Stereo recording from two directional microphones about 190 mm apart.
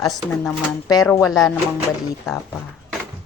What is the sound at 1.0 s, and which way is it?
Speech, 10° left (ahead or behind).